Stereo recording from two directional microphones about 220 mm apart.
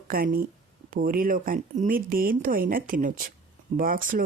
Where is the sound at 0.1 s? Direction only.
40° right (ahead or behind).